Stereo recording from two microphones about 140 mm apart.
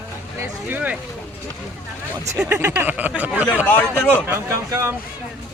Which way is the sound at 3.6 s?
15° left (ahead or behind).